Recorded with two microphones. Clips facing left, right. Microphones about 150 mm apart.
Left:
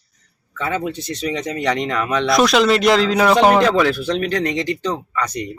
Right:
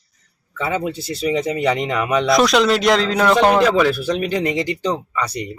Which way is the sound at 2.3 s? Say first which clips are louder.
Left 1 dB; centre (ahead or behind).